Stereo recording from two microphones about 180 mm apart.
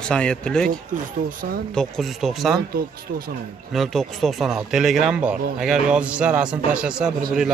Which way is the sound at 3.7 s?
Centre (ahead or behind).